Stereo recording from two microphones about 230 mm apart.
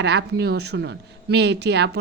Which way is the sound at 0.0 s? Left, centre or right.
Right.